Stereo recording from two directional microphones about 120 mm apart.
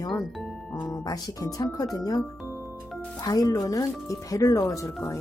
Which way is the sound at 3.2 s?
30° left (ahead or behind).